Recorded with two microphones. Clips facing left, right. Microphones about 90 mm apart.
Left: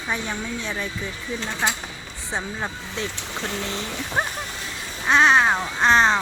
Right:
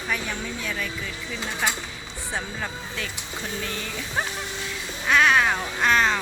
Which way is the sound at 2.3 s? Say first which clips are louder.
Left 3 dB; 20° left (ahead or behind).